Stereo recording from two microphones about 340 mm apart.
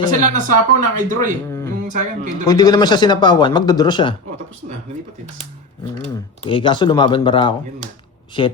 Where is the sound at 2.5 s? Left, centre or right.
Centre.